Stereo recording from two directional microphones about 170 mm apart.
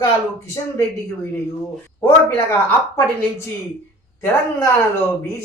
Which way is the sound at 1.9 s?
15° left (ahead or behind).